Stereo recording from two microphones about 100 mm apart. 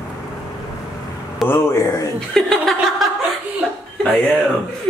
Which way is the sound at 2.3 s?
5° left (ahead or behind).